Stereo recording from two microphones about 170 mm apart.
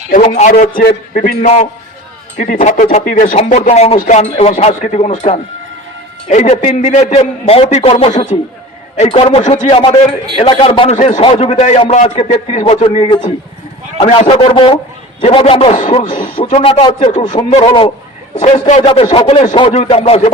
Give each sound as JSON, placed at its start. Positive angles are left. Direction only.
{"t": 0.1, "sound": "a man's voice", "side_deg": 45}
{"t": 16.0, "sound": "a man's voice", "side_deg": 30}